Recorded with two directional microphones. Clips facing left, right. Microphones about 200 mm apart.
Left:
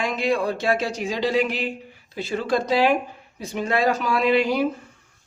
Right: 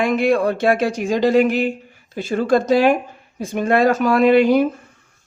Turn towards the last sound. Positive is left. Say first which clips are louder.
# right 7 dB
turn(degrees=-55)  # may be behind; listen again after turning